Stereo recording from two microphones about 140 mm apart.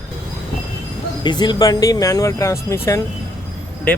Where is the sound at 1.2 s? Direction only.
30° left (ahead or behind).